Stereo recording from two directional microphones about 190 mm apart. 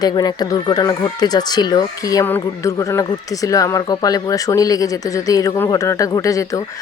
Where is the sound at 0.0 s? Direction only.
20° left (ahead or behind).